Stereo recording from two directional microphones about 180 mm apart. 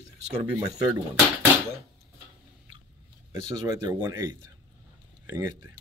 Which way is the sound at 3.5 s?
20° right (ahead or behind).